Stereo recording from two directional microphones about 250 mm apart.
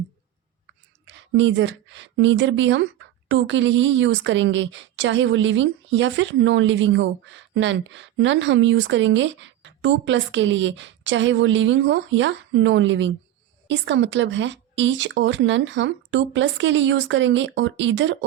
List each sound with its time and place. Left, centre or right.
1.0 s a woman's voice: right